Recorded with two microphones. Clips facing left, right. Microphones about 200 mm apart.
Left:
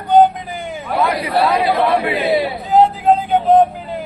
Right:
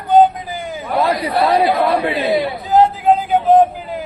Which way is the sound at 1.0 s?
30° right (ahead or behind).